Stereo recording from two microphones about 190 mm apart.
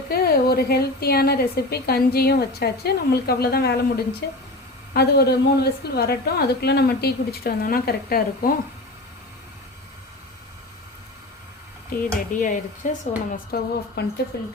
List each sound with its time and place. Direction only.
0.1 s a woman's voice: 55° left (ahead or behind)
12.0 s a woman's voice: 45° left (ahead or behind)